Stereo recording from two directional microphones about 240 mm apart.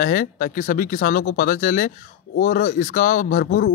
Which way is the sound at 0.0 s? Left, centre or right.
Left.